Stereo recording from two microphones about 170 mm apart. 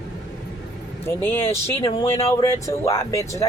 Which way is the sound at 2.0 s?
35° left (ahead or behind).